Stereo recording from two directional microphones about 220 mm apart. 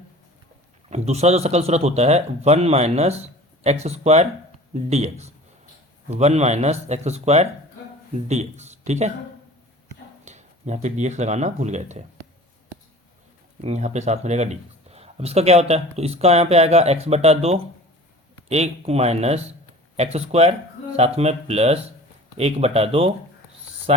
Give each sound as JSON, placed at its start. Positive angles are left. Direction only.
{"t": 0.9, "sound": "speech", "side_deg": -30}
{"t": 10.2, "sound": "speech", "side_deg": -30}
{"t": 13.6, "sound": "speech", "side_deg": -30}